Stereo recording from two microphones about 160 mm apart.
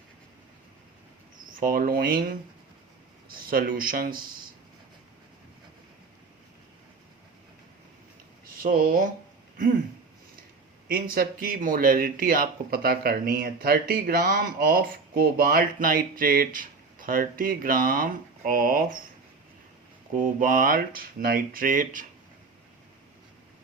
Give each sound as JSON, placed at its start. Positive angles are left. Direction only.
{"t": 1.5, "sound": "speech", "side_deg": -60}
{"t": 3.3, "sound": "speech", "side_deg": -65}
{"t": 8.6, "sound": "speech", "side_deg": -60}
{"t": 10.8, "sound": "speech", "side_deg": -65}
{"t": 20.1, "sound": "speech", "side_deg": -60}